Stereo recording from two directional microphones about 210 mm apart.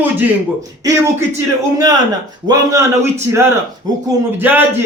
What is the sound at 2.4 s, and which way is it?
Speech, 15° right (ahead or behind).